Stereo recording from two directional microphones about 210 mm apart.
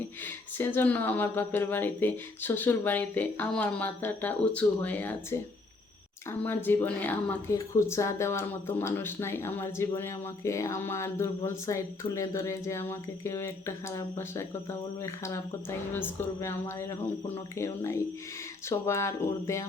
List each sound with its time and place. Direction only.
0.3 s speech: 10° left (ahead or behind)
6.4 s speech: 10° left (ahead or behind)